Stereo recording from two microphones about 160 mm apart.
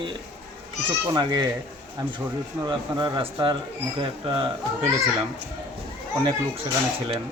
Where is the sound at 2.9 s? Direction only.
25° right (ahead or behind).